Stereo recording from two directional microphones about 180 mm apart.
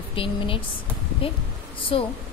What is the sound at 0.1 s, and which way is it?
Speech, 30° left (ahead or behind).